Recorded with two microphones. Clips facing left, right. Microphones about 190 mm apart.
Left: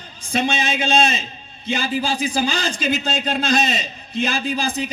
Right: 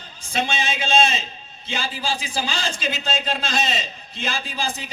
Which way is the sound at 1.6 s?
55° left (ahead or behind).